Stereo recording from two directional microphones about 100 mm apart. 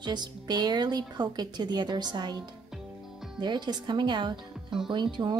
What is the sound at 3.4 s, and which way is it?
Speech, 50° right (ahead or behind).